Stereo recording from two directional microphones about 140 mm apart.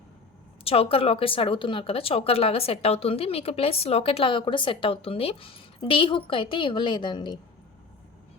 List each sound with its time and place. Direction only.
0.6 s a woman's voice: 45° left (ahead or behind)